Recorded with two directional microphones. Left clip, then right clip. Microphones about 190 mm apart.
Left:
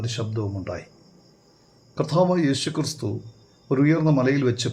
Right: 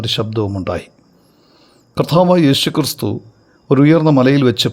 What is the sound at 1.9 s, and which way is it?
Speech, 40° right (ahead or behind).